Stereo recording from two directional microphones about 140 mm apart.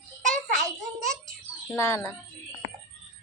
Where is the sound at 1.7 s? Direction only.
20° left (ahead or behind).